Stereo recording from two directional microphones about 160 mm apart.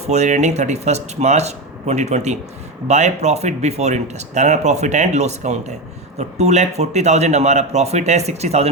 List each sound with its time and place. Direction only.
0.1 s speech: 45° right (ahead or behind)